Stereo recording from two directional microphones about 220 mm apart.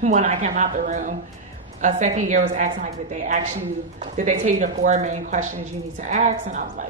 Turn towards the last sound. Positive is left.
turn(degrees=-35)  # may be behind; listen again after turning